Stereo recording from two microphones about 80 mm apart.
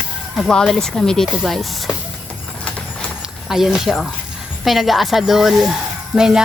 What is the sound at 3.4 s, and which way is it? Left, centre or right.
Speech, centre.